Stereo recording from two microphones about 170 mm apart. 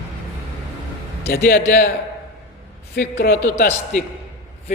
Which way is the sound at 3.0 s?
65° left (ahead or behind).